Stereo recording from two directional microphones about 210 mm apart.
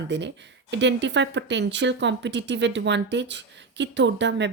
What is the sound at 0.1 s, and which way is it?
Speech, 55° right (ahead or behind).